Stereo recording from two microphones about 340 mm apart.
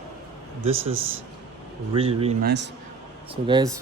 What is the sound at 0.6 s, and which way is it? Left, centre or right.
Speech, centre.